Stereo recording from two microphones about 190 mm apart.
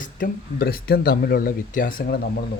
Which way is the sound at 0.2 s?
55° left (ahead or behind).